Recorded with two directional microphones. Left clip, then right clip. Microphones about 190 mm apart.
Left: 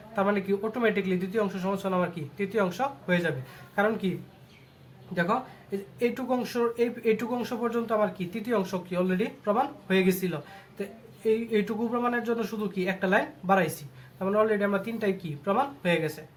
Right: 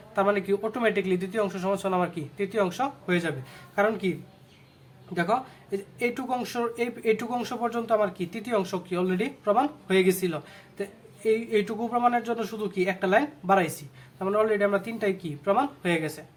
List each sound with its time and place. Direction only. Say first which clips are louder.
0.2 s speech: right 2 dB; 25° right (ahead or behind)
5.1 s speech: right 1 dB; 20° right (ahead or behind)